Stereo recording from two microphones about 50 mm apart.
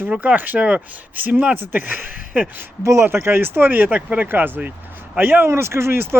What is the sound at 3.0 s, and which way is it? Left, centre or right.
Speech, right.